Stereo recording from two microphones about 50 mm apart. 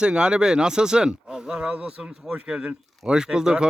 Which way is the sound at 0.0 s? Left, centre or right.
Centre.